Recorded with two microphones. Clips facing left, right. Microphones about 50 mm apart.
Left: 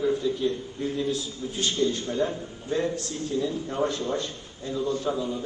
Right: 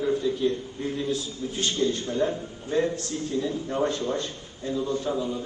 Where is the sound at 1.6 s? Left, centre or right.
Right.